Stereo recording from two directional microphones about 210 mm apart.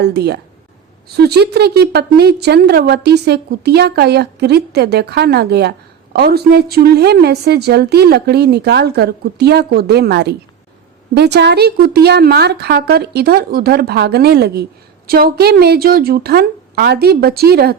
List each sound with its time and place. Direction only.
0.0 s a woman's voice: 55° right (ahead or behind)